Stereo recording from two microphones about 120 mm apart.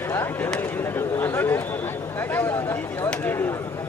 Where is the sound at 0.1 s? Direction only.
20° left (ahead or behind).